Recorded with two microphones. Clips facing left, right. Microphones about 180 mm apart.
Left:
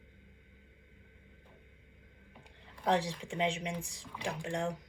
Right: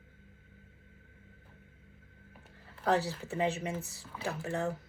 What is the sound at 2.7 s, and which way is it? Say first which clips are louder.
Speech: right 1 dB; 5° right (ahead or behind).